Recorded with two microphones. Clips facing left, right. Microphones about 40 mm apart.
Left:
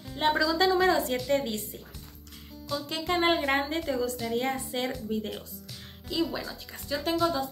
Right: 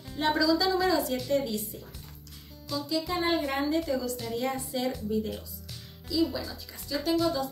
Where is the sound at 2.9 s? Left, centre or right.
Left.